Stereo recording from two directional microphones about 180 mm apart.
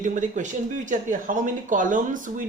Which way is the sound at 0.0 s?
45° right (ahead or behind).